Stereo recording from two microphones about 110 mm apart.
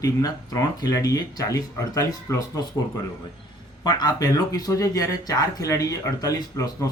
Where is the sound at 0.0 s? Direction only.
30° left (ahead or behind).